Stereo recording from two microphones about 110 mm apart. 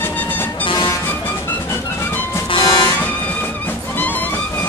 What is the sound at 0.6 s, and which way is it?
Vehicle, 45° left (ahead or behind).